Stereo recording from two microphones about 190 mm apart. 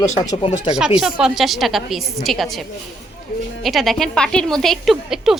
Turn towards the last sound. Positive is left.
turn(degrees=0)  # may be behind; listen again after turning